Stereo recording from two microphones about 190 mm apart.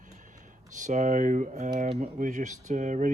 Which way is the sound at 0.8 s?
40° right (ahead or behind).